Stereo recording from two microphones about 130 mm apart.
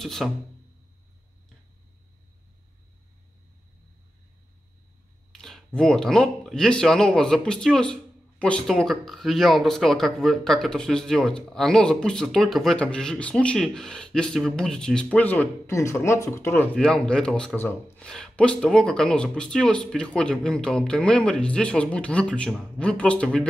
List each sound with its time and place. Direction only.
0.0 s speech: centre (ahead or behind)
5.3 s speech: 5° left (ahead or behind)
16.7 s speech: 5° left (ahead or behind)
17.6 s speech: 15° left (ahead or behind)
17.9 s speech: 5° left (ahead or behind)